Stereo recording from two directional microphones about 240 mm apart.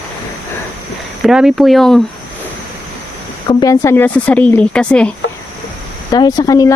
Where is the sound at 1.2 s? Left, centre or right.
Centre.